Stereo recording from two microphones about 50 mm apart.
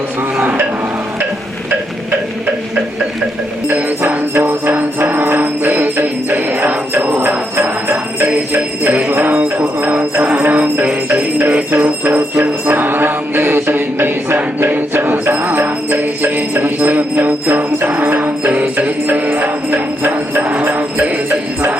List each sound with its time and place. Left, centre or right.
3.7 s music: right
5.3 s jingle bell: right
11.7 s mantra: right
14.6 s jingle bell: right